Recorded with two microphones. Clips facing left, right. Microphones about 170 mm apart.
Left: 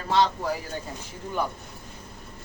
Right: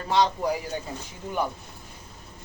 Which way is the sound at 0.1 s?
15° right (ahead or behind).